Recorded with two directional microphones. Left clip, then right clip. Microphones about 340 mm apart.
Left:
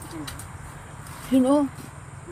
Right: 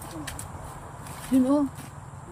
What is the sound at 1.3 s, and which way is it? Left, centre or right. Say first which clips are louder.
Speech: left 3 dB; centre.